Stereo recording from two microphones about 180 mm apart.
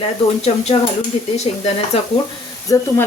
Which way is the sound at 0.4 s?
35° left (ahead or behind).